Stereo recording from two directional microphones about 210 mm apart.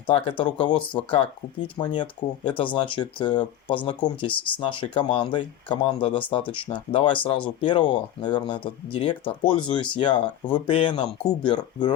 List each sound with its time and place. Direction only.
0.1 s speech: 25° left (ahead or behind)